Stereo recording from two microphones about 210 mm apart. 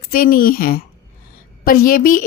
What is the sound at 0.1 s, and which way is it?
A woman's voice, 40° left (ahead or behind).